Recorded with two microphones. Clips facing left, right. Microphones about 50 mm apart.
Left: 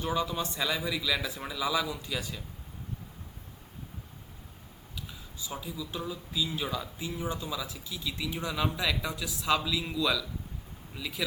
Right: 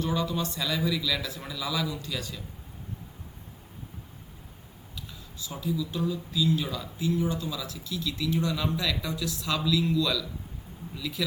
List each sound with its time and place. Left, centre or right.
0.0 s speech: centre
4.9 s speech: centre